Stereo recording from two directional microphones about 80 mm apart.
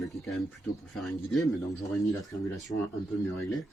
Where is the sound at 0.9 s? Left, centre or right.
Centre.